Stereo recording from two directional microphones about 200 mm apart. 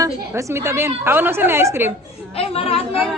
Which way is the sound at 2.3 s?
30° left (ahead or behind).